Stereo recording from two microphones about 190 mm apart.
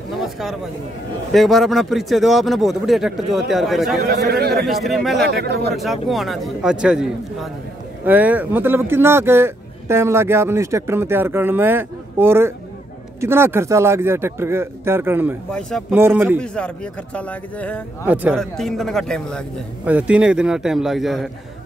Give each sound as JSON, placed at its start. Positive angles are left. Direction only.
{"t": 1.3, "sound": "speech", "side_deg": 0}
{"t": 4.0, "sound": "speech", "side_deg": -55}
{"t": 4.6, "sound": "speech", "side_deg": 0}
{"t": 5.3, "sound": "speech", "side_deg": -60}
{"t": 5.8, "sound": "speech", "side_deg": 0}
{"t": 16.3, "sound": "speech", "side_deg": 5}
{"t": 18.0, "sound": "speech", "side_deg": -10}
{"t": 18.3, "sound": "speech", "side_deg": 0}
{"t": 19.8, "sound": "speech", "side_deg": -5}